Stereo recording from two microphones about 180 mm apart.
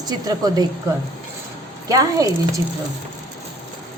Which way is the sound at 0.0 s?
20° right (ahead or behind).